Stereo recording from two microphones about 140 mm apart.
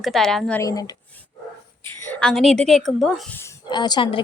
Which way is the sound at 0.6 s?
25° left (ahead or behind).